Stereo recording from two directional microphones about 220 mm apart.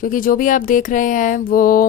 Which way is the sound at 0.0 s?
40° left (ahead or behind).